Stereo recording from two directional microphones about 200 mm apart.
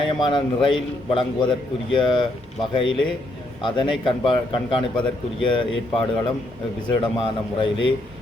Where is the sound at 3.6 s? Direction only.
25° left (ahead or behind).